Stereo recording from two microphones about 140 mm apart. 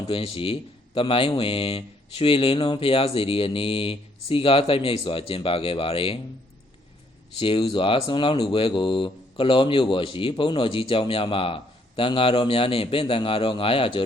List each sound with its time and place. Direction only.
0.1 s speech: 40° left (ahead or behind)
7.3 s speech: 40° left (ahead or behind)